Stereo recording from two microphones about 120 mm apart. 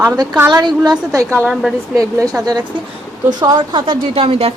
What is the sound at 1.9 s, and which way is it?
A woman's voice, 30° right (ahead or behind).